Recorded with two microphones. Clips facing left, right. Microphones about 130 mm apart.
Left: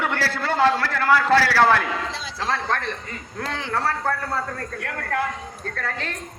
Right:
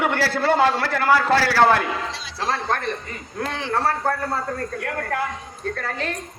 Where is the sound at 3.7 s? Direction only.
25° right (ahead or behind).